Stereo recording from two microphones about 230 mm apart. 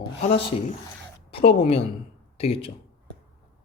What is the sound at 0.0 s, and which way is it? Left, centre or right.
Speech, left.